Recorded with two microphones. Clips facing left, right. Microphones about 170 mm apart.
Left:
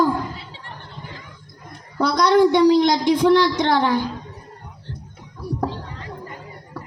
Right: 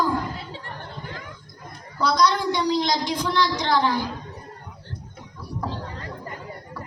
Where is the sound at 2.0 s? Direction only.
55° left (ahead or behind).